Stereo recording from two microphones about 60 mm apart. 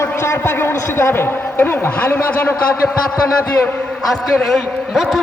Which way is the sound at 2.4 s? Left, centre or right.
Left.